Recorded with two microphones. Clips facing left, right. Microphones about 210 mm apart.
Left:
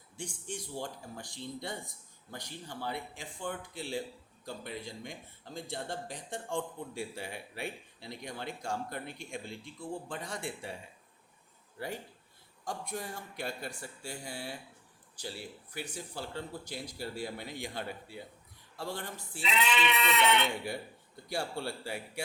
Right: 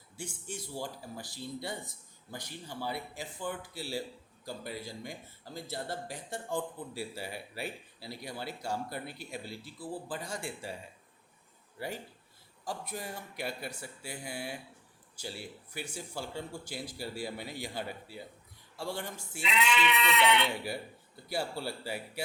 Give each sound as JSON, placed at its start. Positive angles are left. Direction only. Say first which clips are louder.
{"t": 0.2, "sound": "speech", "louder": "left 1 dB", "side_deg": -5}
{"t": 12.6, "sound": "speech", "louder": "even", "side_deg": -5}
{"t": 15.7, "sound": "speech", "louder": "right 1 dB", "side_deg": -10}
{"t": 19.4, "sound": "speech", "louder": "right 1 dB", "side_deg": 35}
{"t": 21.2, "sound": "speech", "louder": "right 1 dB", "side_deg": -5}